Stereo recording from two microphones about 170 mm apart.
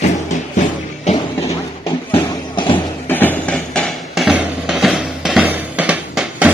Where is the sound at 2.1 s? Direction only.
30° left (ahead or behind).